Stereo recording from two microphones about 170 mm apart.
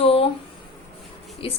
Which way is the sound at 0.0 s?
35° left (ahead or behind).